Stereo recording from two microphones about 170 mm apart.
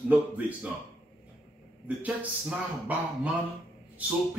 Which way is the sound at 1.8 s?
10° right (ahead or behind).